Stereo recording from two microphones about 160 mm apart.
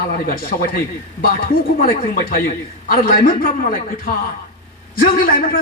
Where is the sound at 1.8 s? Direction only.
65° left (ahead or behind).